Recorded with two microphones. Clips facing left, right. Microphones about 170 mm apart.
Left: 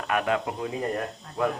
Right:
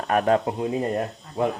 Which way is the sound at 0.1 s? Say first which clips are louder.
Right 6 dB; 40° right (ahead or behind).